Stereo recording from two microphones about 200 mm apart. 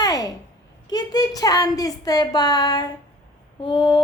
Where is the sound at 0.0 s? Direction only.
20° left (ahead or behind).